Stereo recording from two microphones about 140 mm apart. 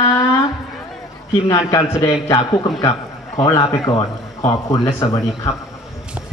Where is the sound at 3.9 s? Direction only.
30° left (ahead or behind).